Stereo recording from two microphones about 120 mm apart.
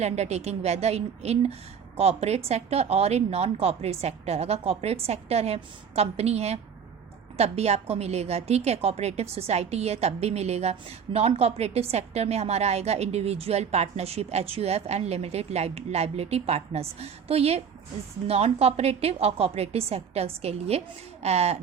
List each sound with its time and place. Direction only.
0.0 s a woman's voice: 65° right (ahead or behind)